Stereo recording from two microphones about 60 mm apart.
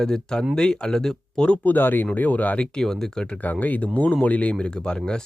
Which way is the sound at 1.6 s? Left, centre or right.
Left.